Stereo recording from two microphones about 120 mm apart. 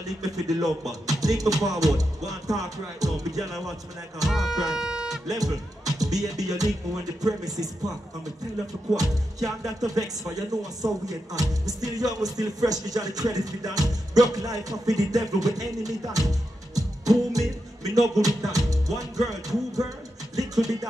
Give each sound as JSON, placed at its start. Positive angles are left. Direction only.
{"t": 0.0, "sound": "speech", "side_deg": -30}
{"t": 3.3, "sound": "music", "side_deg": 0}
{"t": 4.3, "sound": "speech", "side_deg": 0}
{"t": 5.3, "sound": "music", "side_deg": -30}
{"t": 8.9, "sound": "music", "side_deg": -30}
{"t": 9.9, "sound": "speech", "side_deg": -30}
{"t": 20.3, "sound": "music", "side_deg": -30}